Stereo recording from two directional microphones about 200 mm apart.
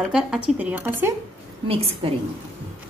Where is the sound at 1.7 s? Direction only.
30° right (ahead or behind).